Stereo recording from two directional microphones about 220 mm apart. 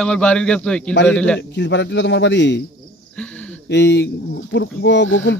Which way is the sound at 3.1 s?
5° left (ahead or behind).